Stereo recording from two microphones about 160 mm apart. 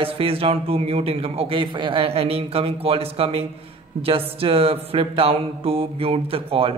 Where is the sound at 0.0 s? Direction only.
35° right (ahead or behind).